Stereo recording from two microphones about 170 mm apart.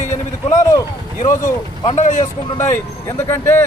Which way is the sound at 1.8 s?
40° left (ahead or behind).